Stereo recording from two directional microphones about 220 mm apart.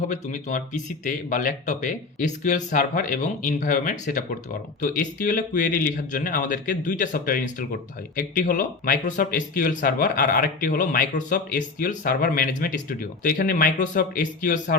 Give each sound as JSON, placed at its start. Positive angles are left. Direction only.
{"t": 0.1, "sound": "speech", "side_deg": 35}